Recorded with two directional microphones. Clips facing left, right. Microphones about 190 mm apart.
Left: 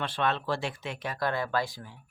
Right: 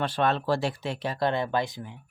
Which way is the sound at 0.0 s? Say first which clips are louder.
Right 4 dB; 40° right (ahead or behind).